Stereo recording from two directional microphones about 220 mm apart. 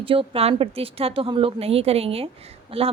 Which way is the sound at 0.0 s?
25° right (ahead or behind).